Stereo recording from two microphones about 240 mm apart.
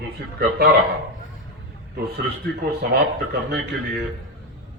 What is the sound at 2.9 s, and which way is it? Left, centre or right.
Speech, right.